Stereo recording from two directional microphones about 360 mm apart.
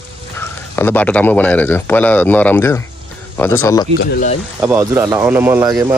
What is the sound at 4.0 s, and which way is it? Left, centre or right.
Speech, left.